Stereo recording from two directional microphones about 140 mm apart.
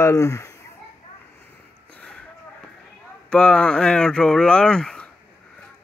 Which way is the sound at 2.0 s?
5° left (ahead or behind).